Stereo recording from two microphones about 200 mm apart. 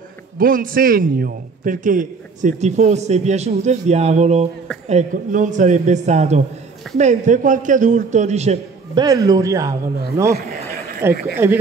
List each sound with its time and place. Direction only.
0.4 s a man's voice: 45° right (ahead or behind)
8.9 s speech: 20° right (ahead or behind)